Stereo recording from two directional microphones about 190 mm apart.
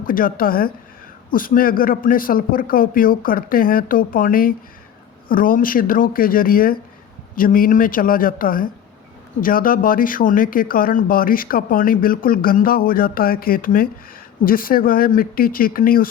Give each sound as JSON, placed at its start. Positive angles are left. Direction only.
{"t": 0.0, "sound": "speech", "side_deg": 50}